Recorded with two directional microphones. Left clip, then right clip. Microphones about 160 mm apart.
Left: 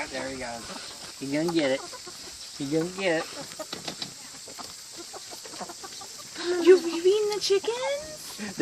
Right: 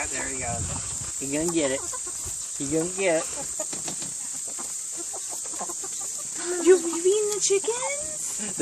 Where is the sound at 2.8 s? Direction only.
45° left (ahead or behind).